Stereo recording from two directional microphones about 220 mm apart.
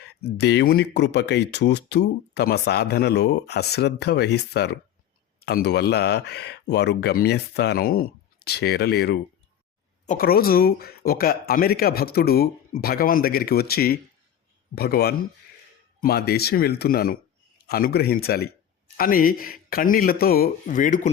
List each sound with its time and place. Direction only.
0.3 s speech: 50° left (ahead or behind)